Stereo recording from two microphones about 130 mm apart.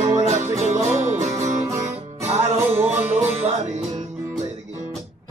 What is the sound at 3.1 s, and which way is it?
Music, 50° right (ahead or behind).